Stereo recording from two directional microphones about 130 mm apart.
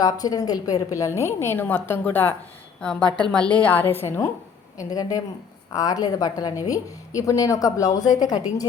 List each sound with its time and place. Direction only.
0.0 s a woman's voice: 30° left (ahead or behind)